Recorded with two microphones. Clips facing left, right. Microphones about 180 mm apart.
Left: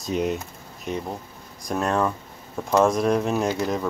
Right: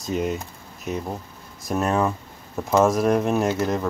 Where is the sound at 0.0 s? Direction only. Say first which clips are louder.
Even; centre (ahead or behind).